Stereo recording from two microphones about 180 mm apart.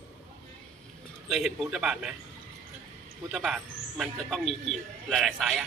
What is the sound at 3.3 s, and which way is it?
A man's voice, 5° right (ahead or behind).